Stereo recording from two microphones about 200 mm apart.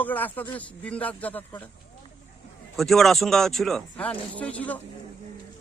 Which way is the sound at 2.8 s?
Centre (ahead or behind).